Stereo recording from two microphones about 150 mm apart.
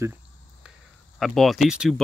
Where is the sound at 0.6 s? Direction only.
5° right (ahead or behind).